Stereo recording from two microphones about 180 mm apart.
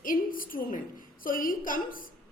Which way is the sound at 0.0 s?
50° left (ahead or behind).